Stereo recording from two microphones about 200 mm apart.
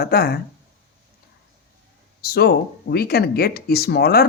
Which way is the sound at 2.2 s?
50° left (ahead or behind).